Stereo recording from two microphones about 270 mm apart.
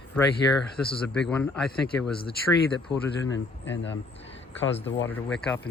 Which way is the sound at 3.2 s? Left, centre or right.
Left.